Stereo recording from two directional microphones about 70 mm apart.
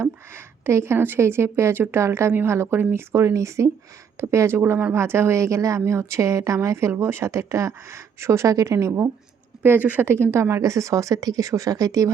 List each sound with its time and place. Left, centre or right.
0.3 s a woman's voice: right
9.6 s a woman's voice: right
10.6 s a woman's voice: right